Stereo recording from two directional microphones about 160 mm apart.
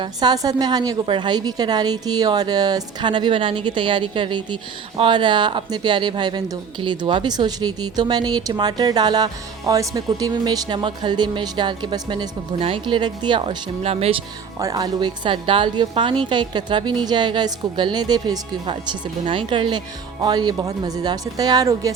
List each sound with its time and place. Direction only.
0.0 s a woman's voice: 25° right (ahead or behind)
14.6 s a woman's voice: 25° right (ahead or behind)